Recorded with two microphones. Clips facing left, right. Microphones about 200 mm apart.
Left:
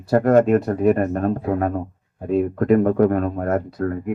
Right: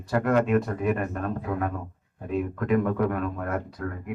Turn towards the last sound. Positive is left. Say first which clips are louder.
# left 9 dB
turn(degrees=40)  # may be behind; listen again after turning